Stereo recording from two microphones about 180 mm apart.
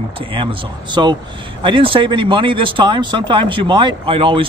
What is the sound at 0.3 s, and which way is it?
Speech, 30° right (ahead or behind).